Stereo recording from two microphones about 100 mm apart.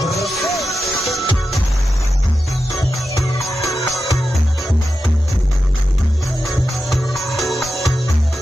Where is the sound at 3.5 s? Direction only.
Centre (ahead or behind).